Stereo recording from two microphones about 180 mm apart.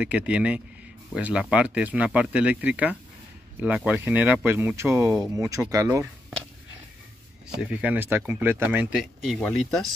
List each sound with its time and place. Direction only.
0.0 s speech: 10° right (ahead or behind)
7.4 s speech: 5° right (ahead or behind)